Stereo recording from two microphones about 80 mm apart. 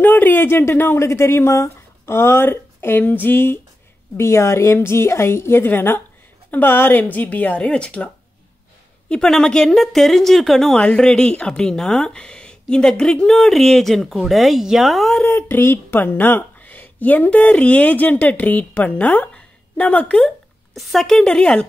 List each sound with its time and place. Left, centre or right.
0.0 s a woman's voice: left
9.1 s a woman's voice: centre
15.4 s a woman's voice: left; by 21.6 s centre